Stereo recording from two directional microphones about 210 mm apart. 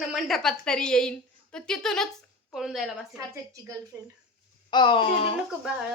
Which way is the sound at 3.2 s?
15° right (ahead or behind).